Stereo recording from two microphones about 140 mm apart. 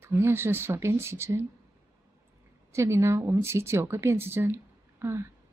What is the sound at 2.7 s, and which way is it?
A woman's voice, 20° right (ahead or behind).